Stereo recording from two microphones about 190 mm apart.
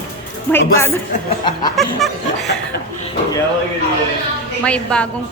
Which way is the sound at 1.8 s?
Centre (ahead or behind).